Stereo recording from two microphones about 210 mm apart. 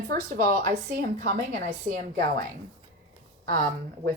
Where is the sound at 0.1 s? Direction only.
40° right (ahead or behind).